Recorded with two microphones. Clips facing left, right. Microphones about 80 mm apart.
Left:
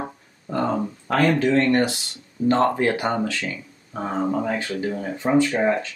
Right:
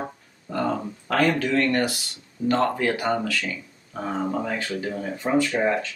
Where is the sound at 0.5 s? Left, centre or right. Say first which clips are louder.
Left 2 dB; left.